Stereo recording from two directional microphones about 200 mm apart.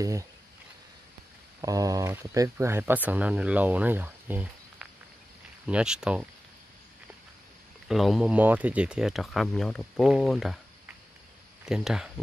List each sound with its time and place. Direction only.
0.0 s speech: 15° right (ahead or behind)
1.6 s speech: 15° right (ahead or behind)
7.9 s speech: centre (ahead or behind)